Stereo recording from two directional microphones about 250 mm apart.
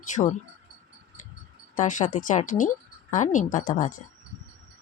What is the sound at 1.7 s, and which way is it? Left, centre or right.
A woman's voice, left.